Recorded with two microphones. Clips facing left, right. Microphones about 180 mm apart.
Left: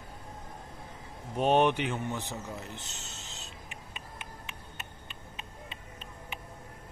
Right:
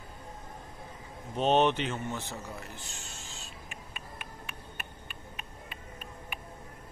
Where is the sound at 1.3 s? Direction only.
10° left (ahead or behind).